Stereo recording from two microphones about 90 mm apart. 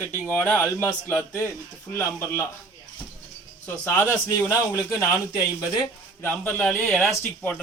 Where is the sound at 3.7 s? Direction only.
30° left (ahead or behind).